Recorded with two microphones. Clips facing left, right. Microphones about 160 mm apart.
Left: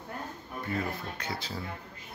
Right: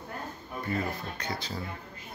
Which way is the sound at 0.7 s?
5° left (ahead or behind).